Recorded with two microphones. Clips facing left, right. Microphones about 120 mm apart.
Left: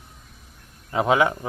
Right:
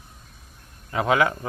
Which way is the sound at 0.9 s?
20° left (ahead or behind).